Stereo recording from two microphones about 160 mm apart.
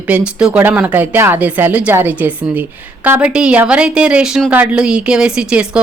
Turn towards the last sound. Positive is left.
turn(degrees=-5)  # may be behind; listen again after turning